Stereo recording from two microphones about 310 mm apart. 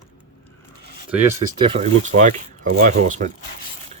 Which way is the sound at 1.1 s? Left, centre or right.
Centre.